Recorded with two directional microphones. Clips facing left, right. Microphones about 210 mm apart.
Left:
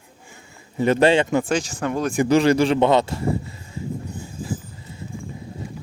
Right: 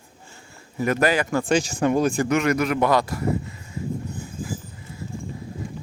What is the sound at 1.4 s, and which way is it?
Speech, 5° right (ahead or behind).